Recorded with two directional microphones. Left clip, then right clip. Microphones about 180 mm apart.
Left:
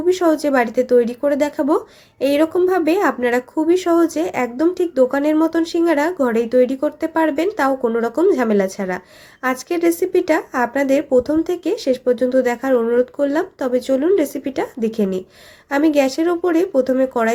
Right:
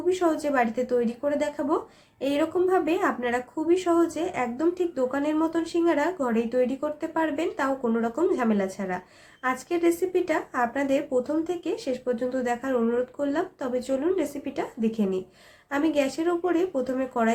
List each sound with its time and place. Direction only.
0.0 s speech: 45° left (ahead or behind)